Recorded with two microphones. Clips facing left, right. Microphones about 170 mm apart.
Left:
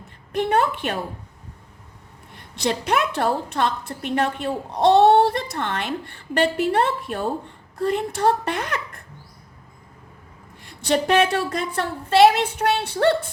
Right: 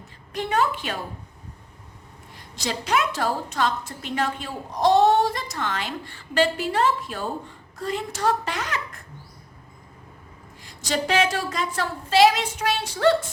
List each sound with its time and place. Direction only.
0.3 s a woman's voice: 55° left (ahead or behind)
2.3 s a woman's voice: 60° left (ahead or behind)
10.6 s a woman's voice: 60° left (ahead or behind)